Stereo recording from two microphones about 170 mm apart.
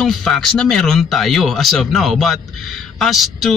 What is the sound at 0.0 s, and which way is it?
Speech, 5° left (ahead or behind).